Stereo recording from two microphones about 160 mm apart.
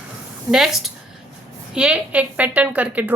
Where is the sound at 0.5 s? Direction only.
Centre (ahead or behind).